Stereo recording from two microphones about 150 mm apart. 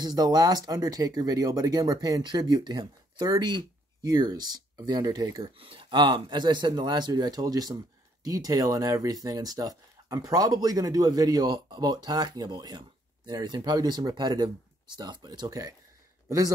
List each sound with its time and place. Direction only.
0.0 s speech: 25° right (ahead or behind)